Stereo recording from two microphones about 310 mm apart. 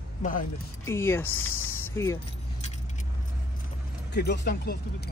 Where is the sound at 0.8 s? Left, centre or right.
Centre.